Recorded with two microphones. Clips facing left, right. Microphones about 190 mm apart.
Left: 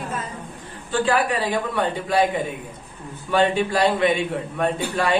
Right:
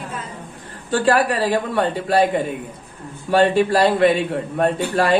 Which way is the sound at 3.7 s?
65° right (ahead or behind).